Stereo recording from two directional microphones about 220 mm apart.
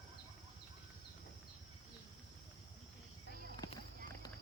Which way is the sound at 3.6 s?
15° left (ahead or behind).